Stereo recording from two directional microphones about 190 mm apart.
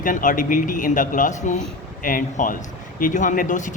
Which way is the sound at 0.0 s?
45° left (ahead or behind).